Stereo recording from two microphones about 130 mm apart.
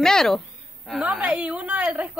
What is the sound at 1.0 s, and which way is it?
A woman's voice, 10° right (ahead or behind).